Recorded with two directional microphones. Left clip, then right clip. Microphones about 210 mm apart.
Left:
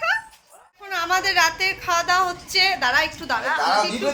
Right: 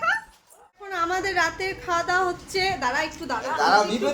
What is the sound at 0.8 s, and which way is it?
A woman's voice, 20° right (ahead or behind).